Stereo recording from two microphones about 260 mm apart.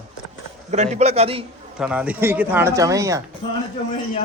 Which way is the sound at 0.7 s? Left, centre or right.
Right.